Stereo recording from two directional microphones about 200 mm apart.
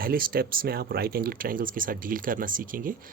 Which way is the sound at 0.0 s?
45° right (ahead or behind).